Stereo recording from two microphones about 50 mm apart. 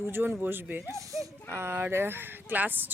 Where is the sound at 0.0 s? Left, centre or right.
Right.